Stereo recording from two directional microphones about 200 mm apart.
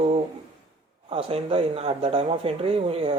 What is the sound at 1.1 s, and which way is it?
Speech, 30° right (ahead or behind).